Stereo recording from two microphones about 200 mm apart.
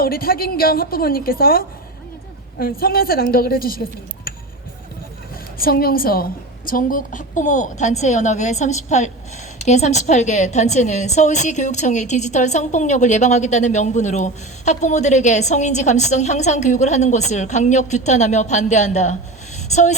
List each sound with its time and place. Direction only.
0.0 s a woman's voice: 50° left (ahead or behind)
5.5 s a woman's voice: 50° left (ahead or behind)